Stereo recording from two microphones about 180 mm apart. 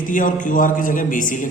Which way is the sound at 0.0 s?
45° left (ahead or behind).